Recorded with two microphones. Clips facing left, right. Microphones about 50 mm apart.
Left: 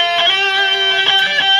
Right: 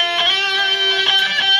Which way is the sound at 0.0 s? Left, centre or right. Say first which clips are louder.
Left 3 dB; left.